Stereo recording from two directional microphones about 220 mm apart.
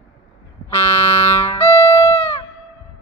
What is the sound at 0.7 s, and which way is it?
Music, 10° left (ahead or behind).